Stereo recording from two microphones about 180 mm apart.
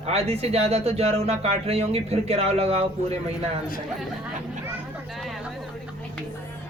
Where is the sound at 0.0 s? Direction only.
35° right (ahead or behind).